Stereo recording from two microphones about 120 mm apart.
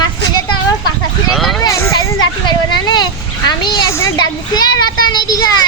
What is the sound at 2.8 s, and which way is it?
A child's voice, 35° left (ahead or behind).